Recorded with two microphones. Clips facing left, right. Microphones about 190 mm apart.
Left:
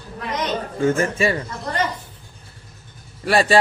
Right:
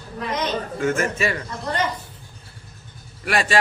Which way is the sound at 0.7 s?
30° left (ahead or behind).